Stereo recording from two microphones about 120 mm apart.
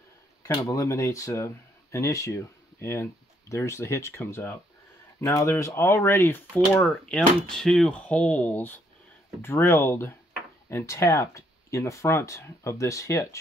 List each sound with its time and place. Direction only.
0.4 s speech: 25° left (ahead or behind)
6.8 s speech: 5° left (ahead or behind); by 13.4 s 25° left (ahead or behind)